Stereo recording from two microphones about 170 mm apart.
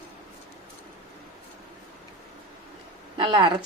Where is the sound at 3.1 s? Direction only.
25° right (ahead or behind).